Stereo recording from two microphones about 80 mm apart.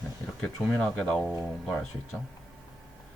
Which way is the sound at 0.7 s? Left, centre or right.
Centre.